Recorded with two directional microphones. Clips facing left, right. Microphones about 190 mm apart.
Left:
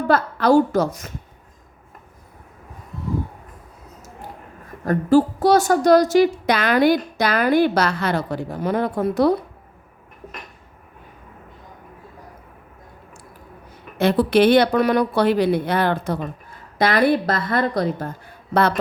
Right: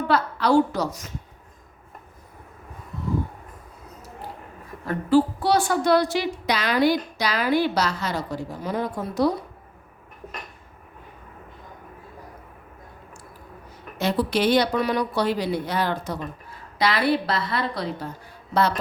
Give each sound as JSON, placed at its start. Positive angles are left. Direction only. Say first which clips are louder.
{"t": 0.1, "sound": "a woman's voice", "louder": "left 4 dB", "side_deg": 50}
{"t": 4.9, "sound": "a woman's voice", "louder": "left 4 dB", "side_deg": 45}
{"t": 14.0, "sound": "a woman's voice", "louder": "left 7 dB", "side_deg": 60}